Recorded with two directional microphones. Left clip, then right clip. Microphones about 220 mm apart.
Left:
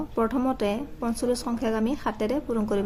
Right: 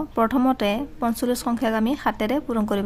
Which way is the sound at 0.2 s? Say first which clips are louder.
Right 5 dB; 35° right (ahead or behind).